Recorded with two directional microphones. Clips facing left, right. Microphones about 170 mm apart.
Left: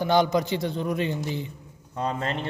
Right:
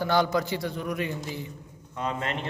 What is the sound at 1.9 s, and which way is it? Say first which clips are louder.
Speech: left 2 dB; 35° left (ahead or behind).